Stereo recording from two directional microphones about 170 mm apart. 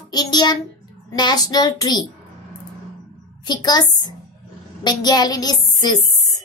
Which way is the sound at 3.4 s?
25° left (ahead or behind).